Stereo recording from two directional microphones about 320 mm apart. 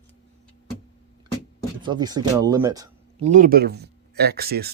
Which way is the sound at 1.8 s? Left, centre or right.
Centre.